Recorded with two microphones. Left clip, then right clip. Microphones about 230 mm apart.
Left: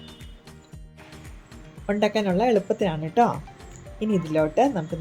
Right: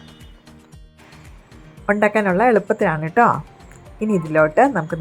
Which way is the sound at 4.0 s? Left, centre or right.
Right.